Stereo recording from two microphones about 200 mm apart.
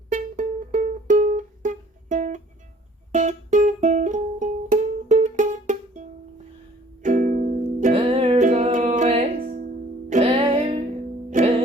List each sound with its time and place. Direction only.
0.1 s music: 40° right (ahead or behind)